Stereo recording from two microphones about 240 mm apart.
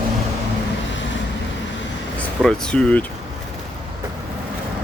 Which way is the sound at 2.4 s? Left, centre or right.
Centre.